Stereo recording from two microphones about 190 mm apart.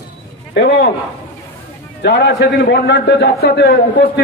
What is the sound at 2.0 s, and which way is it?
A man's voice, 70° left (ahead or behind).